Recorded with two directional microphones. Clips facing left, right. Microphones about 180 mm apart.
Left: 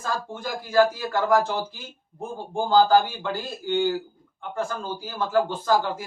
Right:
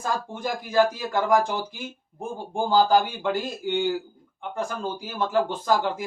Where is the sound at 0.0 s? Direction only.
15° right (ahead or behind).